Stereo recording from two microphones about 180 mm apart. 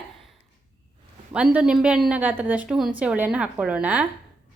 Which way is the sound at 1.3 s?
5° right (ahead or behind).